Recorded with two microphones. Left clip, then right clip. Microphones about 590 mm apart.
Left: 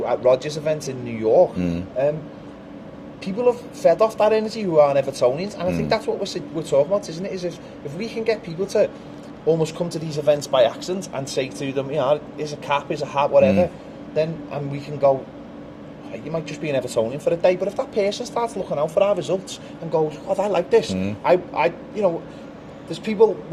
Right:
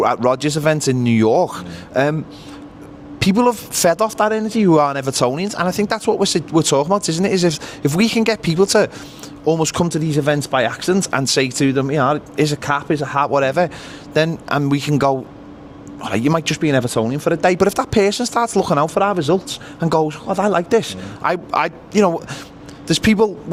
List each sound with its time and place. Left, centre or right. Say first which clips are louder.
0.0 s speech: right 2 dB; right
3.2 s speech: right 4 dB; right
11.7 s speech: left 1 dB; right
16.6 s speech: right 1 dB; right